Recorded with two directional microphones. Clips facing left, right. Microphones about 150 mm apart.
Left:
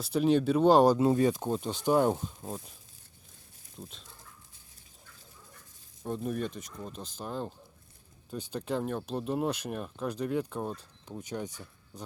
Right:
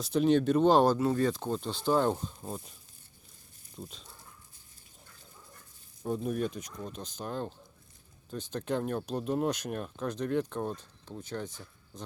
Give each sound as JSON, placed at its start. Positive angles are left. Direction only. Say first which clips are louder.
{"t": 0.0, "sound": "speech", "louder": "even", "side_deg": 5}
{"t": 0.9, "sound": "speech", "louder": "left 3 dB", "side_deg": 20}
{"t": 1.4, "sound": "speech", "louder": "left 2 dB", "side_deg": 5}
{"t": 3.8, "sound": "speech", "louder": "right 2 dB", "side_deg": 0}
{"t": 6.0, "sound": "speech", "louder": "right 2 dB", "side_deg": 0}